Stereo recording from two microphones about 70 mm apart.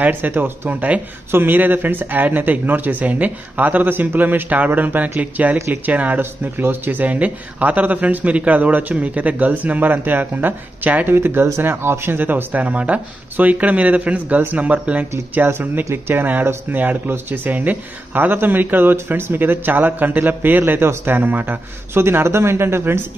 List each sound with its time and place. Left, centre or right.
0.0 s speech: right